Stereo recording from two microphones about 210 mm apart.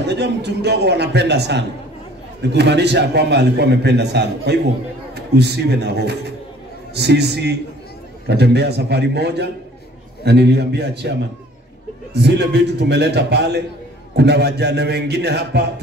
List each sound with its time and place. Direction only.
0.0 s a man's voice: 55° right (ahead or behind)